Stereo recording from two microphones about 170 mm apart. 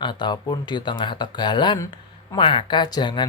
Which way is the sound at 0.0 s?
25° left (ahead or behind).